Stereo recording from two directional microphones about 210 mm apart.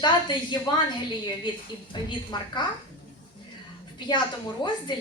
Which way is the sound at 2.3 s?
20° left (ahead or behind).